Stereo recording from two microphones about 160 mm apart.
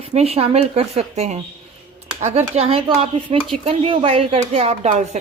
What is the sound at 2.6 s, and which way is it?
Speech, 35° right (ahead or behind).